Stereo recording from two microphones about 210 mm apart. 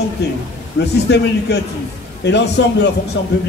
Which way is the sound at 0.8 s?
50° left (ahead or behind).